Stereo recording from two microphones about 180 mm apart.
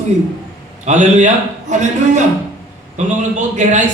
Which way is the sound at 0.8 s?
40° right (ahead or behind).